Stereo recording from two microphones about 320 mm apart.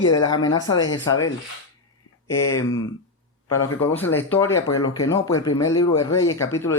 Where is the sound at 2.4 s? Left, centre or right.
Centre.